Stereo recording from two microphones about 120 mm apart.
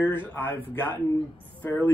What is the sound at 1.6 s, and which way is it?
Speech, 15° left (ahead or behind).